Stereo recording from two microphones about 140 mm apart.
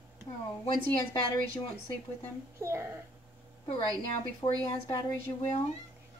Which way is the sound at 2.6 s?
15° right (ahead or behind).